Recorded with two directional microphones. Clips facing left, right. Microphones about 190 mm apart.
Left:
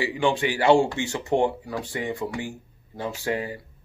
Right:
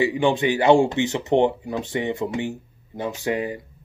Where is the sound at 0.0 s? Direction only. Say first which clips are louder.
Right 4 dB; 20° right (ahead or behind).